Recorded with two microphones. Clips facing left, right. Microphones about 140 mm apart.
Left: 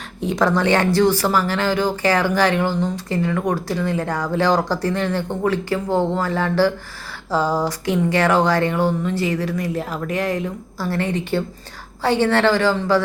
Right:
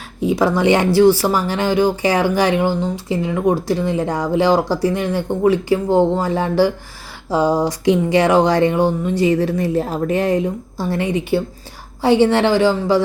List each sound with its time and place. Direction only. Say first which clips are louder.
0.2 s speech: right 3 dB; 5° right (ahead or behind)